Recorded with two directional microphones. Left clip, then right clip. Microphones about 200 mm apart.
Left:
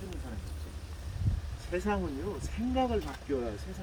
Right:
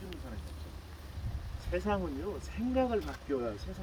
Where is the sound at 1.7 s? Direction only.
5° left (ahead or behind).